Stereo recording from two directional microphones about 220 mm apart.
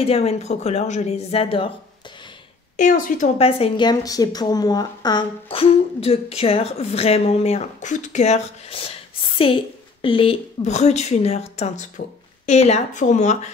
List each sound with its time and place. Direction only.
0.0 s a woman's voice: 25° left (ahead or behind)
2.8 s a woman's voice: 35° left (ahead or behind)
10.0 s a woman's voice: 25° left (ahead or behind)